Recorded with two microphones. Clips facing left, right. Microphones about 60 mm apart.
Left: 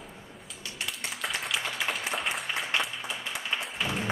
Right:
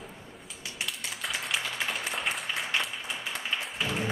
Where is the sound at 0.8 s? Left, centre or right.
Centre.